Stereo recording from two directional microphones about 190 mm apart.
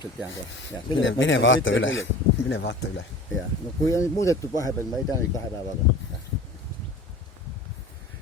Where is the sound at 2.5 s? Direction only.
70° left (ahead or behind).